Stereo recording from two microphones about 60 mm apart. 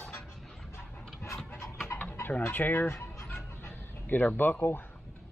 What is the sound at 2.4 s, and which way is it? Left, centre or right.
Speech, left.